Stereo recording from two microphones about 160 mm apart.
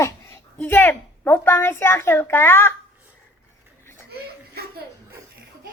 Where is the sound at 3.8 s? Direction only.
15° left (ahead or behind).